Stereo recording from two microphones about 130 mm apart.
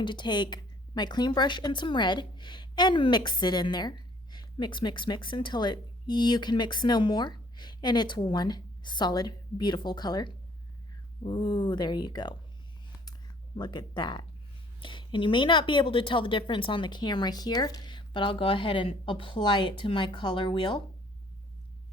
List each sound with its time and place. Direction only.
0.0 s speech: 35° left (ahead or behind)
13.6 s speech: 35° left (ahead or behind)